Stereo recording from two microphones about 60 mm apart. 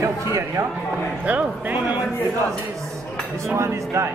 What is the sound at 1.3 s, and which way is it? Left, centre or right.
Speech, right.